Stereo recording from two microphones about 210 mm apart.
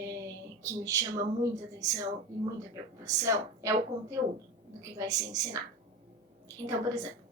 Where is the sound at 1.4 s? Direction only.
15° right (ahead or behind).